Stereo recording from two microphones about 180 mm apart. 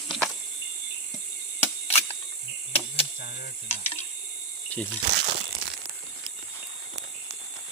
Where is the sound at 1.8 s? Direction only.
35° left (ahead or behind).